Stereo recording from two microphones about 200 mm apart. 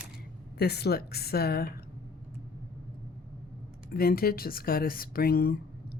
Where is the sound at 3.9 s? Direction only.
50° left (ahead or behind).